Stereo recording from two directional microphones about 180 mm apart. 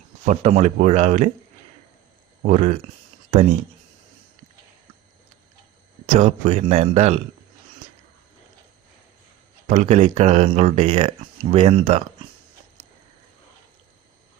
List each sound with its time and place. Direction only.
0.3 s speech: 35° right (ahead or behind)
2.4 s speech: 40° right (ahead or behind)
6.1 s speech: 45° right (ahead or behind)
9.6 s speech: 40° right (ahead or behind)